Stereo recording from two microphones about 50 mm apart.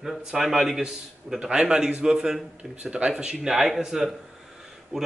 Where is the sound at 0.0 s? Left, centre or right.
Centre.